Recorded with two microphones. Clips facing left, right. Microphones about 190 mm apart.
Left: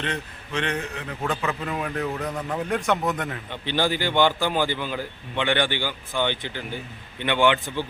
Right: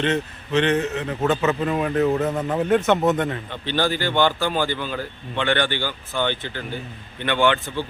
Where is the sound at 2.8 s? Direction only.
25° right (ahead or behind).